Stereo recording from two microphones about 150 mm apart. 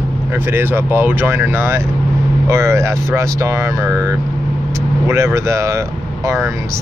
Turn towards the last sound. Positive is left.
turn(degrees=-20)  # may be behind; listen again after turning